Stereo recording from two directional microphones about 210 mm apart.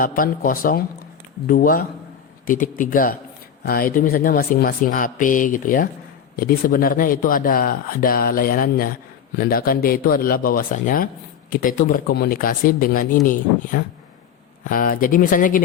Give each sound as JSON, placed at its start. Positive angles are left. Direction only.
{"t": 0.0, "sound": "speech", "side_deg": 40}